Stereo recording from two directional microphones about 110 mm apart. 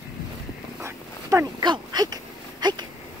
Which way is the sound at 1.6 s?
40° right (ahead or behind).